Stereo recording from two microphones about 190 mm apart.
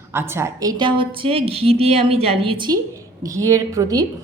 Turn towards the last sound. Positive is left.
turn(degrees=-20)  # may be behind; listen again after turning